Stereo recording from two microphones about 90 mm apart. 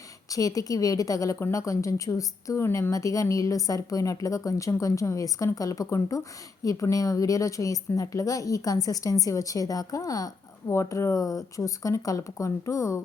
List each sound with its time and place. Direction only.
0.3 s a woman's voice: 40° left (ahead or behind)
2.9 s a woman's voice: 40° left (ahead or behind)